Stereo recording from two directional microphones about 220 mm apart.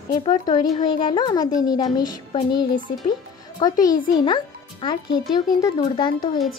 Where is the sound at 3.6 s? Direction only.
20° left (ahead or behind).